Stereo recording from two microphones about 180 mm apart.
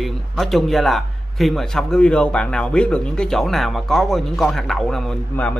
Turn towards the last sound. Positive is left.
turn(degrees=5)  # may be behind; listen again after turning